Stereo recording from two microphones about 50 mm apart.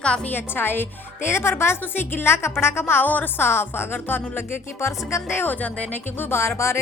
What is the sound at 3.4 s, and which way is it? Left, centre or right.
Speech, left.